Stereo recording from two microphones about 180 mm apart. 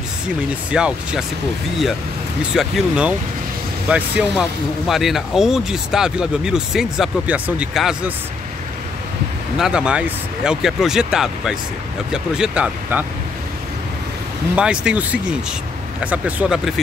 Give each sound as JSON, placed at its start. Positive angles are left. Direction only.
{"t": 0.7, "sound": "speech", "side_deg": -5}
{"t": 2.5, "sound": "speech", "side_deg": 0}
{"t": 9.6, "sound": "speech", "side_deg": -5}
{"t": 14.5, "sound": "speech", "side_deg": -5}